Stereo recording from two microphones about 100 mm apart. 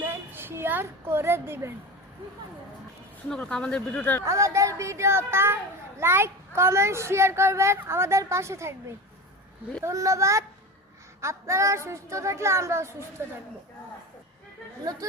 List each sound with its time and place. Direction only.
0.0 s a sound: 20° right (ahead or behind)
3.2 s speech: 10° left (ahead or behind)
4.3 s a child's voice: 30° right (ahead or behind)
9.8 s a child's voice: 30° right (ahead or behind)